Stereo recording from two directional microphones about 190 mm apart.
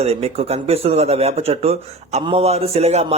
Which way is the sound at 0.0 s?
30° right (ahead or behind).